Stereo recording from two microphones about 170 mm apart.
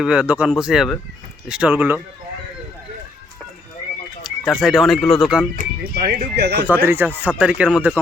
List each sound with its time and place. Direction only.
0.0 s speech: 5° right (ahead or behind)
4.2 s speech: centre (ahead or behind)
5.5 s speech: 70° right (ahead or behind)
6.8 s speech: 10° right (ahead or behind)